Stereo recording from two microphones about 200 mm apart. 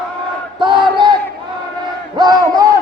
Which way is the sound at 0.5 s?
25° right (ahead or behind).